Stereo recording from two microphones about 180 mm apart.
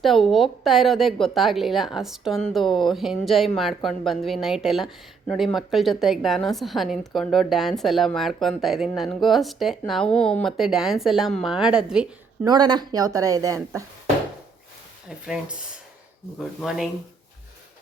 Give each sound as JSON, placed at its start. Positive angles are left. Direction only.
{"t": 0.0, "sound": "a woman's voice", "side_deg": 0}
{"t": 12.5, "sound": "speech", "side_deg": -25}
{"t": 16.6, "sound": "a woman's voice", "side_deg": 0}